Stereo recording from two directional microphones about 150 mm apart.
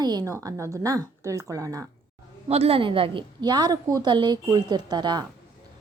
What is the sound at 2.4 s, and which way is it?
A woman's voice, 40° right (ahead or behind).